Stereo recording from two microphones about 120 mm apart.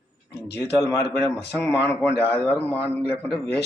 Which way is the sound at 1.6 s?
20° left (ahead or behind).